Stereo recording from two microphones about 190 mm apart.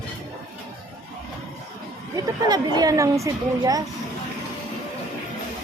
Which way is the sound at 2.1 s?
20° right (ahead or behind).